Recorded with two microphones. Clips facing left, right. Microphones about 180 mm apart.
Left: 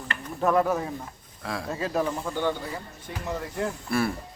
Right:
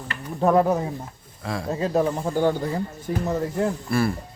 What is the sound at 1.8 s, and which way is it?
Speech, 30° right (ahead or behind).